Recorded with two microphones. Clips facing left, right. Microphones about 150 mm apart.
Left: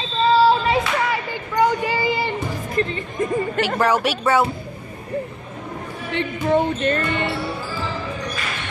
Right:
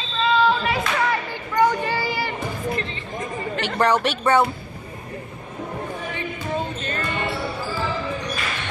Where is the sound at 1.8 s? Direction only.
15° left (ahead or behind).